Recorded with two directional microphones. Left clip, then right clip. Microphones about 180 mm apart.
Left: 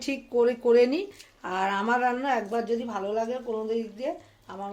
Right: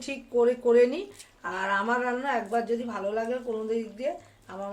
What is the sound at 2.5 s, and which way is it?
Speech, 20° left (ahead or behind).